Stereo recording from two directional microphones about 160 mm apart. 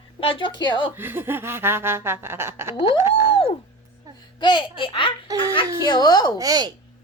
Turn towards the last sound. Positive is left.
turn(degrees=-25)  # may be behind; listen again after turning